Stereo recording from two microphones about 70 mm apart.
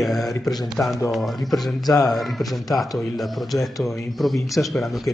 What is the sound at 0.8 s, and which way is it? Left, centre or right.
Speech, left.